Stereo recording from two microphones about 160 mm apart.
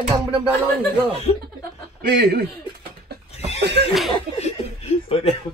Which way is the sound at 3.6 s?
90° right.